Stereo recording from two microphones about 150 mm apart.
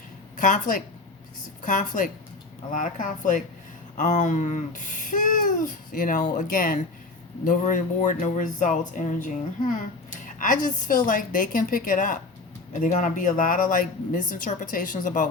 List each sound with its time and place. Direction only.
0.3 s a woman's voice: 55° left (ahead or behind)